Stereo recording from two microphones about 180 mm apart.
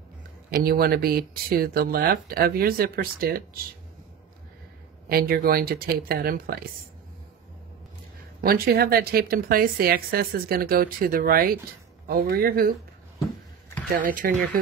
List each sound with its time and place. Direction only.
0.7 s a woman's voice: 55° right (ahead or behind)
5.0 s a woman's voice: 55° right (ahead or behind)
8.4 s a woman's voice: 55° right (ahead or behind)
13.8 s speech: 50° right (ahead or behind)